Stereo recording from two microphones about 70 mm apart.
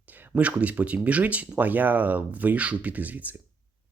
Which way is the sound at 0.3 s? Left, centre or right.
Centre.